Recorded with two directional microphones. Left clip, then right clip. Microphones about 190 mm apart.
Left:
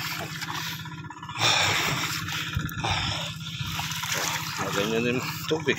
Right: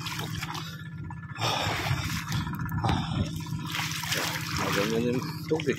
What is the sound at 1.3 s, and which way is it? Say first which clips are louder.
Speech: left 6 dB; 15° right (ahead or behind).